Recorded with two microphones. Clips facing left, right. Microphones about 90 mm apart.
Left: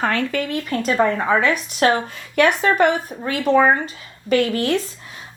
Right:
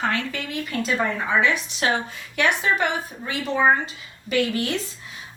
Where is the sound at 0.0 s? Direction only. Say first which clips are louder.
Left 5 dB; 50° left (ahead or behind).